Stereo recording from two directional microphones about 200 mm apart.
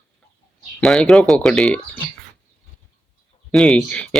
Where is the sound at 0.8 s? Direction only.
Centre (ahead or behind).